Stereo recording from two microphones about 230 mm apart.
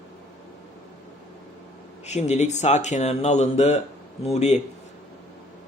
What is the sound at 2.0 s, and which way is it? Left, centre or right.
Speech, left.